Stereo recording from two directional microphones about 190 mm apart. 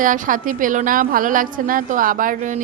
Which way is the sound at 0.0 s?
45° right (ahead or behind).